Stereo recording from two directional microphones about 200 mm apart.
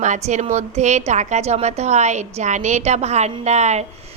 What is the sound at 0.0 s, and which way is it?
A woman's voice, 35° right (ahead or behind).